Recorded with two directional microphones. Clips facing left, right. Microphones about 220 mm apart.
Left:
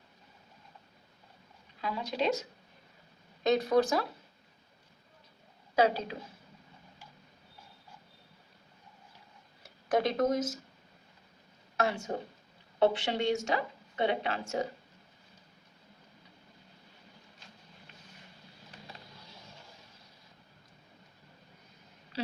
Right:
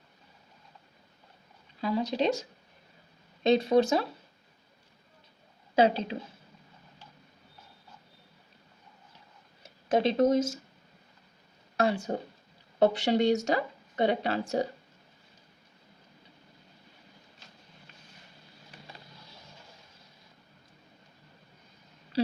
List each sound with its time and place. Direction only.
1.8 s speech: 35° right (ahead or behind)
5.7 s a woman's voice: 25° right (ahead or behind)
9.6 s speech: 25° right (ahead or behind)
11.8 s speech: 35° right (ahead or behind)
22.1 s a sound: 35° right (ahead or behind)